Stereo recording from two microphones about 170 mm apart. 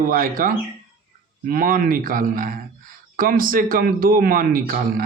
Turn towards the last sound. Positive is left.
turn(degrees=-55)  # may be behind; listen again after turning